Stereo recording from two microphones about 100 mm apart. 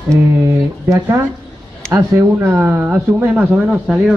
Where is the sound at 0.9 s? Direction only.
25° right (ahead or behind).